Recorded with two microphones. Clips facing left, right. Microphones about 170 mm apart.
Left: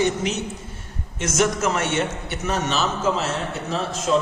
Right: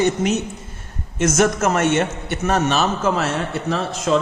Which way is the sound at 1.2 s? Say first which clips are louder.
Right 4 dB; 50° right (ahead or behind).